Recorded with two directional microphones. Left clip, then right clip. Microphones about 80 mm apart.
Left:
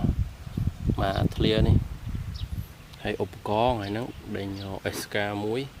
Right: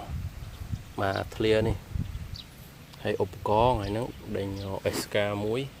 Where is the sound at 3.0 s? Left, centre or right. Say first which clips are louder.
Right 1 dB; left.